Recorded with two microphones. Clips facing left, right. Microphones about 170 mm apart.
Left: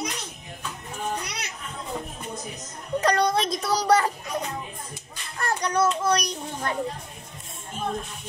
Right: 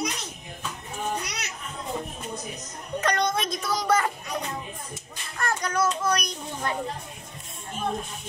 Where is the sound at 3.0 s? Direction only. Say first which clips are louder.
Left 3 dB; 35° left (ahead or behind).